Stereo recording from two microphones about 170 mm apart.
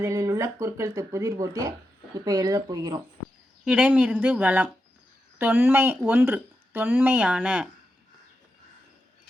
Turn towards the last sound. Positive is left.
turn(degrees=-10)  # may be behind; listen again after turning